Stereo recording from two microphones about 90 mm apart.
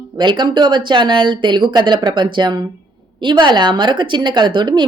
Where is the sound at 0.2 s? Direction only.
60° right (ahead or behind).